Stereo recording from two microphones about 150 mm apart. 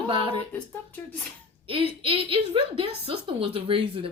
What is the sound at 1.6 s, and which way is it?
A woman's voice, 35° right (ahead or behind).